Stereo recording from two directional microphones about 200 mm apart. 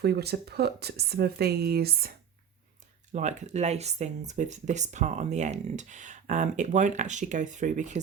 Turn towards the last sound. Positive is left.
turn(degrees=-35)  # may be behind; listen again after turning